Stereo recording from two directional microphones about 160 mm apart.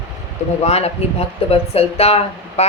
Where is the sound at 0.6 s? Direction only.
40° left (ahead or behind).